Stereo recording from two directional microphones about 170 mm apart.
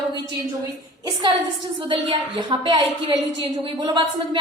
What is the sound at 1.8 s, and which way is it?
A woman's voice, 30° right (ahead or behind).